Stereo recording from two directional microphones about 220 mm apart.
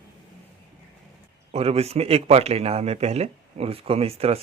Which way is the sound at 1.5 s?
30° right (ahead or behind).